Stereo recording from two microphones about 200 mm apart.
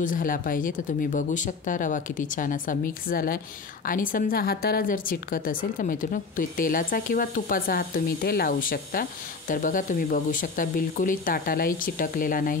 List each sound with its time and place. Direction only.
0.0 s a woman's voice: 45° left (ahead or behind)